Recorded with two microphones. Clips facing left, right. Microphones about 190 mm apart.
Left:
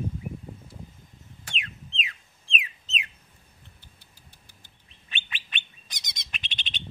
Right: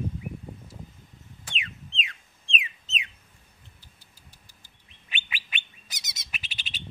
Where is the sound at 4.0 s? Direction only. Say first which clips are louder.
Even; 55° left (ahead or behind).